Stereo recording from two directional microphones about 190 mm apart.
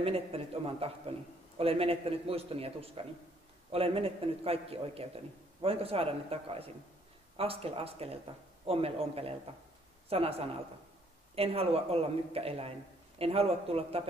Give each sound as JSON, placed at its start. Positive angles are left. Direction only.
{"t": 0.0, "sound": "a man's voice", "side_deg": -30}